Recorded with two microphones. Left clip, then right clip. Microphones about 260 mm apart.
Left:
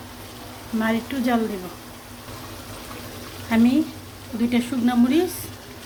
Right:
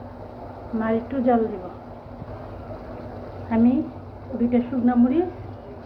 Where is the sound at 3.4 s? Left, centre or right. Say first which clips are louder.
Left 2 dB; left.